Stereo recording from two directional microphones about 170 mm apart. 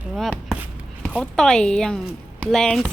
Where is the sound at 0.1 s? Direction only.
Centre (ahead or behind).